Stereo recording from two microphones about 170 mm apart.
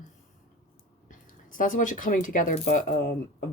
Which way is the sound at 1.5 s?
50° left (ahead or behind).